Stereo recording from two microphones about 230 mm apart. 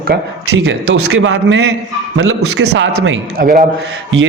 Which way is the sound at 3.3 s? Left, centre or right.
Right.